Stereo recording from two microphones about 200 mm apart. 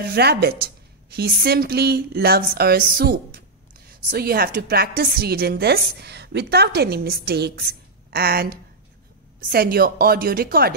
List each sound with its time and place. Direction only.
0.0 s a woman's voice: 50° right (ahead or behind)